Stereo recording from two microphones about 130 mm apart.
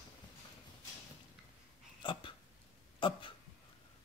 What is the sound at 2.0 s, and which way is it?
Hiccup, 40° left (ahead or behind).